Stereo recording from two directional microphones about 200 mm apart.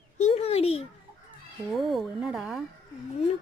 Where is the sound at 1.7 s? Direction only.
Centre (ahead or behind).